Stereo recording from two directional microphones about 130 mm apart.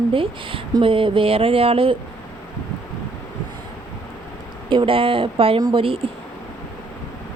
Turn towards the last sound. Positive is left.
turn(degrees=-45)  # may be behind; listen again after turning